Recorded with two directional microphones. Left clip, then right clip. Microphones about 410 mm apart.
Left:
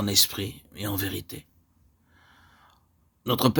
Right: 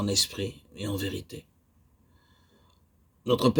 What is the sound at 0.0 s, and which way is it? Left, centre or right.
Speech, left.